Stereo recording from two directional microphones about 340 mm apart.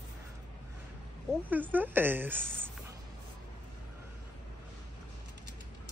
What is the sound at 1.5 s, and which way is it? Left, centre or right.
Speech, centre.